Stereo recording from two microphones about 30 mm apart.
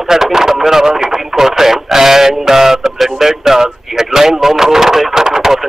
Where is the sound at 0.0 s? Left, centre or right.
Centre.